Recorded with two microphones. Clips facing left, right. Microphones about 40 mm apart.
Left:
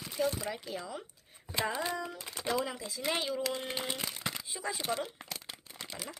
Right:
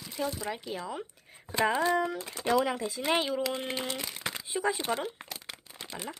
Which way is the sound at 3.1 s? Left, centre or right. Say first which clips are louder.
Right 4 dB; right.